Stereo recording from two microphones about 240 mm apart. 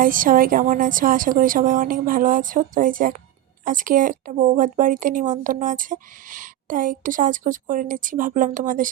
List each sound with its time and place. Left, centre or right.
0.0 s speech: right